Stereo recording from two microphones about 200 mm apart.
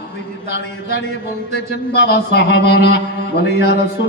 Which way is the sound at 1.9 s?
60° left (ahead or behind).